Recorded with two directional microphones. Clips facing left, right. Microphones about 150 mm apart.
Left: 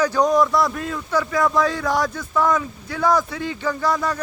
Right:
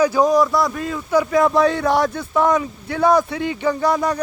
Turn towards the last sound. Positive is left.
turn(degrees=-20)  # may be behind; listen again after turning